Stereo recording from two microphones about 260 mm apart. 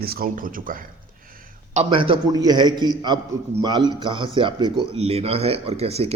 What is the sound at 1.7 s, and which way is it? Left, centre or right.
A man's voice, centre.